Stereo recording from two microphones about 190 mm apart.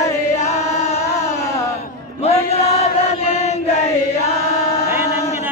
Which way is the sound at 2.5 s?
35° left (ahead or behind).